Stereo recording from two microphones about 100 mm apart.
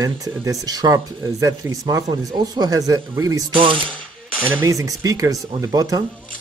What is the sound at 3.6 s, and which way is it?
Speech, 60° right (ahead or behind).